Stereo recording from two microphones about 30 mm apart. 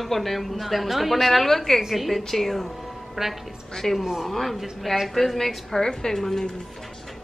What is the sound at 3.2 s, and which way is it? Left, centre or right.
Speech, centre.